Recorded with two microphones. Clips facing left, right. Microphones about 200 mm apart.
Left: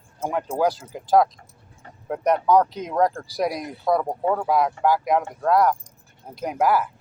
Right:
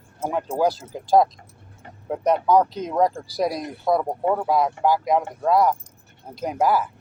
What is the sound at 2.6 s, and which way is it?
Speech, 15° left (ahead or behind).